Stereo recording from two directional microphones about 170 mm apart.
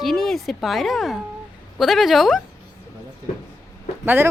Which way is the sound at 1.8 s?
Centre (ahead or behind).